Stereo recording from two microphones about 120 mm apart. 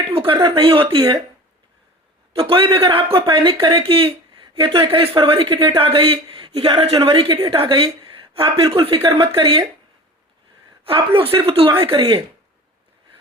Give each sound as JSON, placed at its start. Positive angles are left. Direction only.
{"t": 0.1, "sound": "a sound", "side_deg": -50}
{"t": 0.3, "sound": "speech", "side_deg": -45}
{"t": 2.3, "sound": "a woman's voice", "side_deg": -50}
{"t": 10.8, "sound": "speech", "side_deg": -50}